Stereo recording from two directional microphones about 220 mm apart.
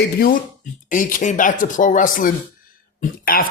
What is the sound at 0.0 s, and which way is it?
Speech, 40° left (ahead or behind).